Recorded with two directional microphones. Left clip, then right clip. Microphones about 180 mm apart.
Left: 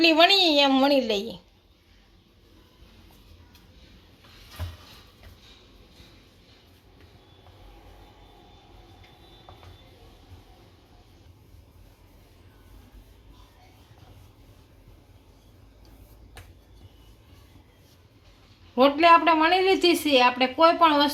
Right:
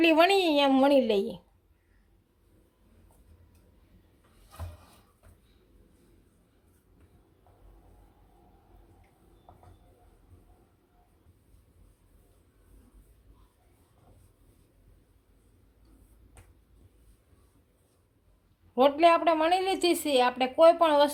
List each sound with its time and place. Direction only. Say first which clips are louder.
0.0 s a woman's voice: left 4 dB; 35° right (ahead or behind)
18.7 s a woman's voice: left 4 dB; 55° right (ahead or behind)